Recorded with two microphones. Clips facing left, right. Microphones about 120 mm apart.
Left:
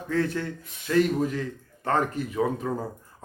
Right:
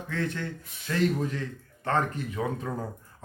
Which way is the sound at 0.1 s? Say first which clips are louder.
Left 6 dB; 35° left (ahead or behind).